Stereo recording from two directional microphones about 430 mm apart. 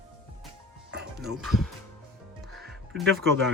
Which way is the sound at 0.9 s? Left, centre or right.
Right.